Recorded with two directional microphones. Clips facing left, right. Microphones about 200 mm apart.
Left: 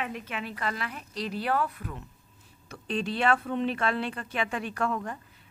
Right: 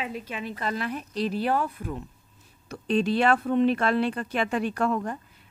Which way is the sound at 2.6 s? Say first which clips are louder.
Right 7 dB; 40° right (ahead or behind).